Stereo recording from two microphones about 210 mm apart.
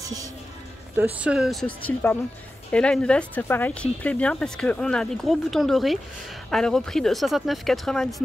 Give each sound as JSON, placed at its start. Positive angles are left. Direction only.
{"t": 0.0, "sound": "speech", "side_deg": -15}
{"t": 0.9, "sound": "speech", "side_deg": -5}